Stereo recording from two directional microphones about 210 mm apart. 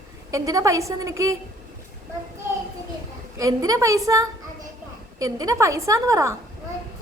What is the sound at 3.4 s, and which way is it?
A woman's voice, 15° right (ahead or behind).